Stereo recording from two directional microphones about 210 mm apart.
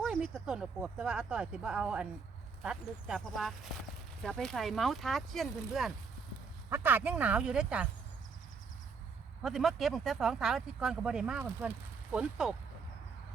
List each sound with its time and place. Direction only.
0.0 s speech: centre (ahead or behind)
9.4 s speech: centre (ahead or behind)